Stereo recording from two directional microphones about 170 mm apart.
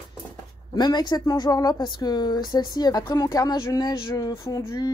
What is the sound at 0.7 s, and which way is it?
Speech, 25° left (ahead or behind).